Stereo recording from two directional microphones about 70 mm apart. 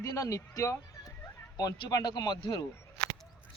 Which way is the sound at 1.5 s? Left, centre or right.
Left.